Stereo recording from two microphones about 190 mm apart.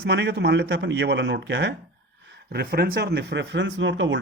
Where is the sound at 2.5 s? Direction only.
55° right (ahead or behind); by 4.2 s 75° right (ahead or behind).